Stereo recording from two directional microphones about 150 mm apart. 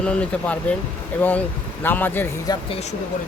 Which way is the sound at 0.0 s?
10° left (ahead or behind).